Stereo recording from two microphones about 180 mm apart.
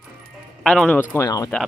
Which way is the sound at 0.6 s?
Centre (ahead or behind).